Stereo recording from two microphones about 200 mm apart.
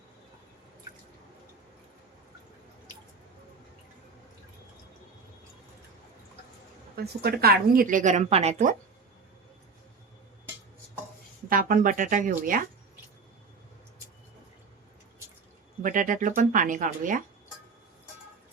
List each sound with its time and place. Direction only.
6.9 s speech: 55° right (ahead or behind); by 8.7 s 35° right (ahead or behind)
11.4 s speech: 45° right (ahead or behind)
15.8 s speech: 40° right (ahead or behind)